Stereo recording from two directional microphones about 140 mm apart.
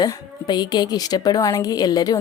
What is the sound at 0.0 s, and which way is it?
A woman's voice, 30° left (ahead or behind).